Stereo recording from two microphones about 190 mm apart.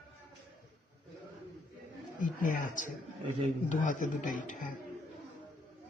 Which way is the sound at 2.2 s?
45° left (ahead or behind).